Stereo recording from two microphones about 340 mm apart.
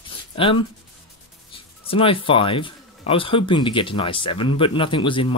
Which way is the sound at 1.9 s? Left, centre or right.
Centre.